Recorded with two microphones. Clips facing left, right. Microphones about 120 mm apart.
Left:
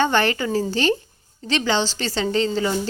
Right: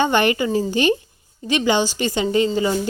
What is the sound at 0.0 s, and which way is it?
A woman's voice, 15° right (ahead or behind).